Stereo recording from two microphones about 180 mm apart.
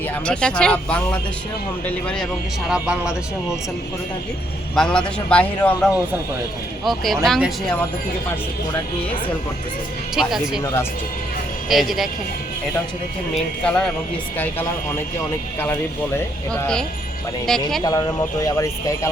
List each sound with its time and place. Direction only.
0.3 s a man's voice: 5° left (ahead or behind)
2.6 s a man's voice: 5° right (ahead or behind)
4.7 s a man's voice: 5° left (ahead or behind)
10.2 s a man's voice: centre (ahead or behind)
10.6 s speech: 15° left (ahead or behind)
11.7 s a man's voice: centre (ahead or behind)
13.3 s a man's voice: 5° left (ahead or behind)
16.5 s a man's voice: 5° left (ahead or behind)
17.8 s speech: 20° left (ahead or behind)